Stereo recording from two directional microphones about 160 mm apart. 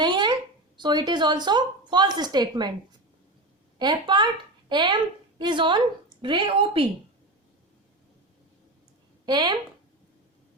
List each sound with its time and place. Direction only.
0.0 s a sound: 25° right (ahead or behind)
0.8 s a woman's voice: 25° right (ahead or behind)
3.8 s a woman's voice: 30° right (ahead or behind)
9.2 s a woman's voice: 25° right (ahead or behind)